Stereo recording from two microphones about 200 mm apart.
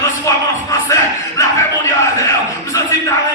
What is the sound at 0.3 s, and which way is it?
Music, 15° left (ahead or behind).